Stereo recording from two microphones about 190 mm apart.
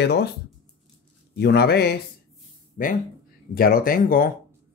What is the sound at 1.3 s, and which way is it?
Speech, 60° left (ahead or behind).